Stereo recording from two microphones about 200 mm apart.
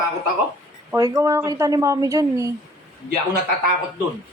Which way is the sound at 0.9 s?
15° right (ahead or behind).